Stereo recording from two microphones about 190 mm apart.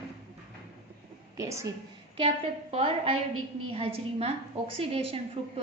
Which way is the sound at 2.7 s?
30° right (ahead or behind).